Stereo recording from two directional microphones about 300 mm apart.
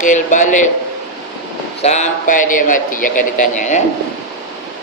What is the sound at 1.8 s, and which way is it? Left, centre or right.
Speech, left.